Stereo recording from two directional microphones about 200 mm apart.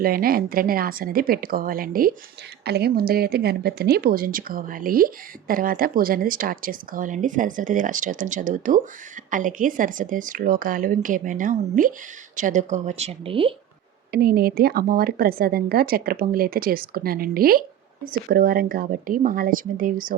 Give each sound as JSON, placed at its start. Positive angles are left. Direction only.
{"t": 0.0, "sound": "a woman's voice", "side_deg": -45}
{"t": 14.1, "sound": "speech", "side_deg": -50}